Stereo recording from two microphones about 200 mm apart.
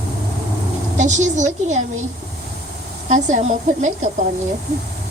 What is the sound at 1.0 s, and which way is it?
Speech, 35° right (ahead or behind).